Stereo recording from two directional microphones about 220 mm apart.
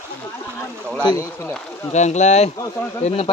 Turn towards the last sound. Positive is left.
turn(degrees=25)  # may be behind; listen again after turning